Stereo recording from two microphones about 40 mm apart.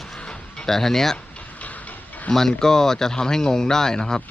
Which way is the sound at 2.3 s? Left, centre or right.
Centre.